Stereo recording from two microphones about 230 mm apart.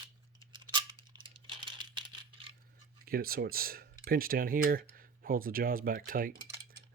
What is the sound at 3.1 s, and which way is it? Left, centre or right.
Speech, right.